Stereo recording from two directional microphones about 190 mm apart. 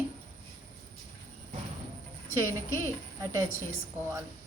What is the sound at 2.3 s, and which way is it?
A woman's voice, 15° right (ahead or behind).